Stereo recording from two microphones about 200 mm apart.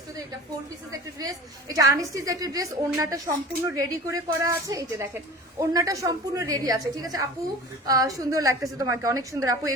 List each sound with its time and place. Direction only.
0.9 s a woman's voice: 15° right (ahead or behind)